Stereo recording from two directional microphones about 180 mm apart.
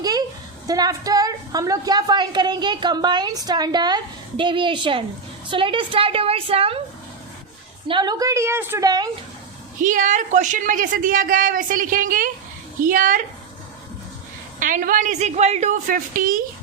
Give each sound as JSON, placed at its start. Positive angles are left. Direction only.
{"t": 0.0, "sound": "a sound", "side_deg": -20}
{"t": 0.7, "sound": "a woman's voice", "side_deg": -20}
{"t": 7.9, "sound": "a woman's voice", "side_deg": -25}
{"t": 9.8, "sound": "speech", "side_deg": -45}
{"t": 14.6, "sound": "speech", "side_deg": -50}